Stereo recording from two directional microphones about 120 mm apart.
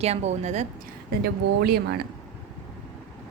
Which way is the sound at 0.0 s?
65° right (ahead or behind).